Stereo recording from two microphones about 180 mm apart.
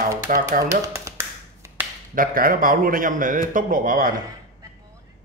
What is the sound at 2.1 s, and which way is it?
A man's voice, 50° right (ahead or behind).